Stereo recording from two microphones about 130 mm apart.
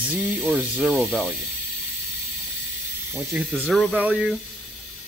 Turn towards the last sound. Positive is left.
turn(degrees=5)  # may be behind; listen again after turning